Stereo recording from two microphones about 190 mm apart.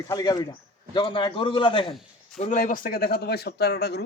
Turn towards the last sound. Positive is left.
turn(degrees=60)  # may be behind; listen again after turning